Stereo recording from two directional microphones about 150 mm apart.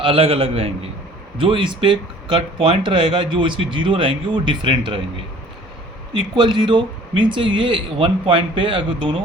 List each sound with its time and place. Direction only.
0.0 s speech: 40° right (ahead or behind)
6.1 s speech: 30° right (ahead or behind)